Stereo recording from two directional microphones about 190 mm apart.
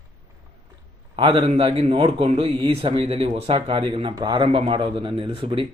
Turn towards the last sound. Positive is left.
turn(degrees=-25)  # may be behind; listen again after turning